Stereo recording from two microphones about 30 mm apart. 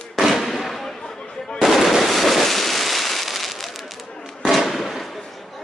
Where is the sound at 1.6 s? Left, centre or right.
Centre.